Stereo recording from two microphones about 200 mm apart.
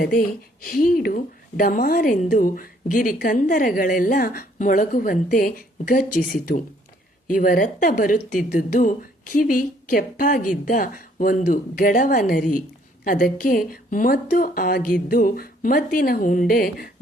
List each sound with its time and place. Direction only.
0.0 s speech: 45° left (ahead or behind)